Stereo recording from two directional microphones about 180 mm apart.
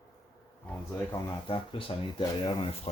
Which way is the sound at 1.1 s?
30° left (ahead or behind).